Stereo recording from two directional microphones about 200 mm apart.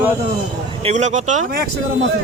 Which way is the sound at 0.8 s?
35° right (ahead or behind).